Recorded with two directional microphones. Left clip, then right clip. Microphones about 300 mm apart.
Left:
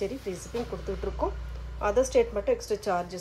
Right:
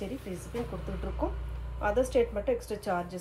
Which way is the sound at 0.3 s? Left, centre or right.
Left.